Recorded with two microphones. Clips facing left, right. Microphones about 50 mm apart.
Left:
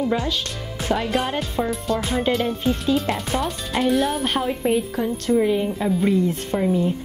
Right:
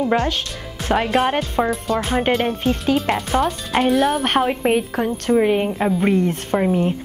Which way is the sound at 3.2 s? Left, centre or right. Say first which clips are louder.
Right 5 dB; centre.